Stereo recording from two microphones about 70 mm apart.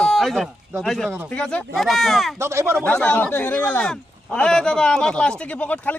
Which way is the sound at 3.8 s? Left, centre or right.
Centre.